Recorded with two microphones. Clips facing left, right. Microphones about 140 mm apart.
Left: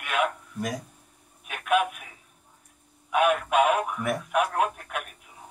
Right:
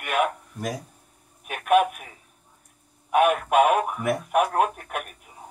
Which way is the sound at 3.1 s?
50° right (ahead or behind).